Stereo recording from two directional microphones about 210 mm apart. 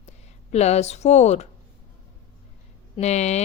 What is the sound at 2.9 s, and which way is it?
Speech, 30° left (ahead or behind).